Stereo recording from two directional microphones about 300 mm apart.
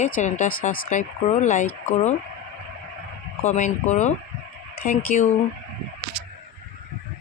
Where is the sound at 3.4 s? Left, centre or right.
Left.